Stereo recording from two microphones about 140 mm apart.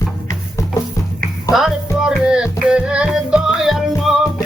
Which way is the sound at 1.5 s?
Centre (ahead or behind).